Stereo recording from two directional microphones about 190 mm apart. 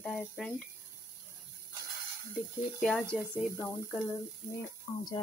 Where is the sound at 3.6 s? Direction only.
15° left (ahead or behind).